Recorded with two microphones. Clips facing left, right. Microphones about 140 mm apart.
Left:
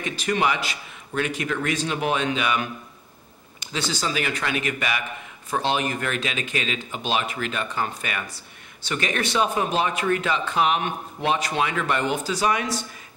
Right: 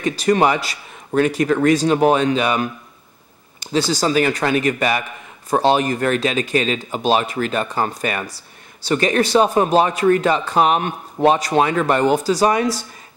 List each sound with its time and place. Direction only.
0.0 s speech: 40° right (ahead or behind)